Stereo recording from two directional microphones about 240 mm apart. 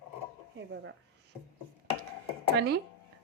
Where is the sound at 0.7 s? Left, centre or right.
Right.